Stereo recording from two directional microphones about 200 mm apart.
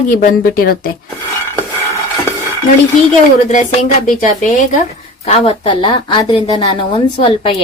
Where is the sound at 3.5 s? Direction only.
35° left (ahead or behind).